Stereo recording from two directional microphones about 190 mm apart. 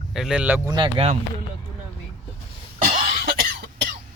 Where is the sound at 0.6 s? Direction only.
25° right (ahead or behind).